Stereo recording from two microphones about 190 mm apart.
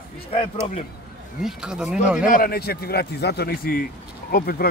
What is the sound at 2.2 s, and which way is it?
A man's voice, 45° left (ahead or behind).